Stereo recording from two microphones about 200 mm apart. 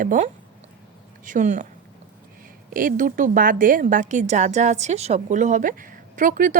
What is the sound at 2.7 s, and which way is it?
A woman's voice, 45° right (ahead or behind).